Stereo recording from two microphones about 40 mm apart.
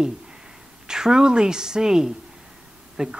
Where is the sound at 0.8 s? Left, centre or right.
Centre.